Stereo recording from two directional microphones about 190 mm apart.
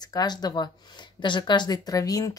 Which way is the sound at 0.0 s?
20° left (ahead or behind).